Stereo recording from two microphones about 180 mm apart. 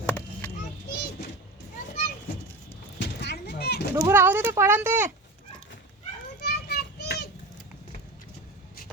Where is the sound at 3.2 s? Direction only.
65° left (ahead or behind).